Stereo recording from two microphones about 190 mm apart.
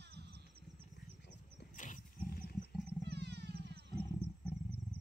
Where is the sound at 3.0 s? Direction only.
60° right (ahead or behind).